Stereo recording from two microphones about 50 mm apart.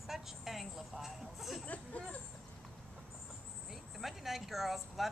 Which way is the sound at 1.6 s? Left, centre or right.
Left.